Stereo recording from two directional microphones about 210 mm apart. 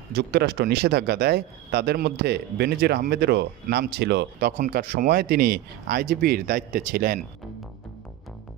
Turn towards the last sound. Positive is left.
turn(degrees=-45)  # may be behind; listen again after turning